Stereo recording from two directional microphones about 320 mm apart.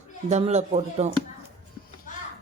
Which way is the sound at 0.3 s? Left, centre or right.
Right.